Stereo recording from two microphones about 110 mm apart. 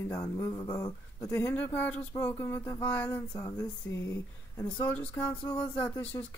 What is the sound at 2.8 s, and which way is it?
Speech, 10° left (ahead or behind).